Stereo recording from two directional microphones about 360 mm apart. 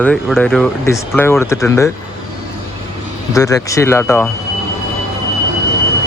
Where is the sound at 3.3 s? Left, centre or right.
Centre.